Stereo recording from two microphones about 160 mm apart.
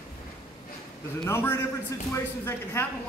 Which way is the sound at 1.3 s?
15° left (ahead or behind).